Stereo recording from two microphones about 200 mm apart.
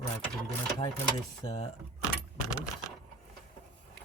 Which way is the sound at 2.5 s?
15° left (ahead or behind).